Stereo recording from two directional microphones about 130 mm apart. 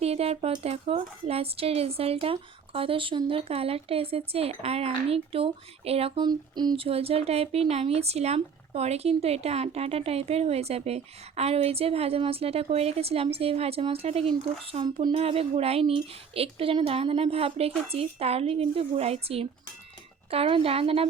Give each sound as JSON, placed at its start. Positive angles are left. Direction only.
{"t": 0.0, "sound": "speech", "side_deg": -50}
{"t": 6.1, "sound": "a sound", "side_deg": -35}
{"t": 6.7, "sound": "speech", "side_deg": -50}
{"t": 15.1, "sound": "speech", "side_deg": -50}